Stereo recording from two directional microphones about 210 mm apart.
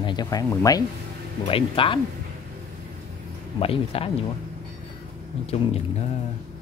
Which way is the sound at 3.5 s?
25° left (ahead or behind).